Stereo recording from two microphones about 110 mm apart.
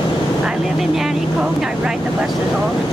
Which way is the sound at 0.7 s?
5° right (ahead or behind).